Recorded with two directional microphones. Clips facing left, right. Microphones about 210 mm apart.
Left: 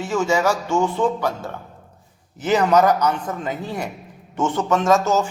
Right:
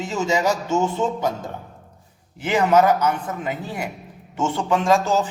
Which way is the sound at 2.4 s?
10° right (ahead or behind).